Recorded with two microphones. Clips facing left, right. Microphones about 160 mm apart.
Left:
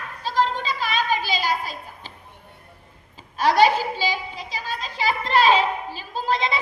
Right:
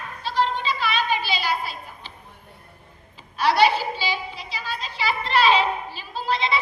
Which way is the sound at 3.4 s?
45° left (ahead or behind).